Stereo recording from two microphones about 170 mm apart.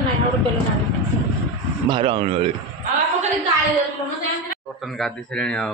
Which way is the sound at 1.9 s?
30° right (ahead or behind).